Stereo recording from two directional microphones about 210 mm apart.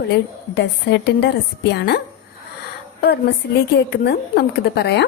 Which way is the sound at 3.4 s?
50° left (ahead or behind).